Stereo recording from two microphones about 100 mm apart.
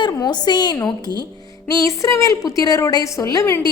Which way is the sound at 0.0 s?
45° left (ahead or behind).